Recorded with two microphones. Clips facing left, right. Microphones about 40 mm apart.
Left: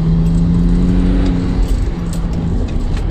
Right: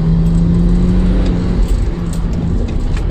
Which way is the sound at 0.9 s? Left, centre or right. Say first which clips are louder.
Left 1 dB; centre.